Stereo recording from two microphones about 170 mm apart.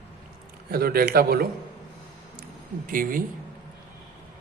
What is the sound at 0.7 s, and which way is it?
Speech, 60° right (ahead or behind).